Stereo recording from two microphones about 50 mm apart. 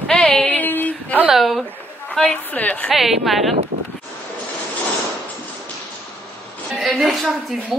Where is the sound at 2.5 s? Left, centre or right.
Left.